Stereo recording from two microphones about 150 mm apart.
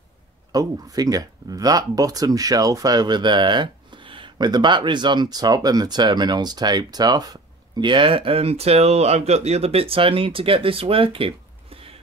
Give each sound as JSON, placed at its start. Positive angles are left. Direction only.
{"t": 0.5, "sound": "speech", "side_deg": -25}